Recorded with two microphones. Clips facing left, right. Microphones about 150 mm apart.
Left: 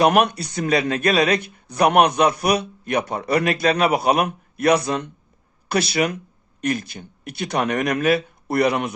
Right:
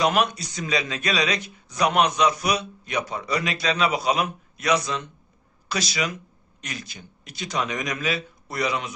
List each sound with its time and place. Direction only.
0.0 s speech: 60° left (ahead or behind)